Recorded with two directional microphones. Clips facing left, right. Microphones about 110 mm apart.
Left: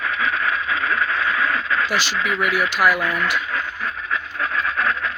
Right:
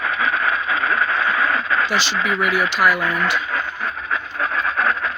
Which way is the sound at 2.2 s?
40° right (ahead or behind).